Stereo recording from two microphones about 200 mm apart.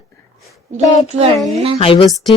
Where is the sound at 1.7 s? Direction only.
25° left (ahead or behind).